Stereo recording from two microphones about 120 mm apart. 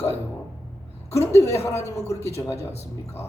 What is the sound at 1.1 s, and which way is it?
A man's voice, 25° left (ahead or behind).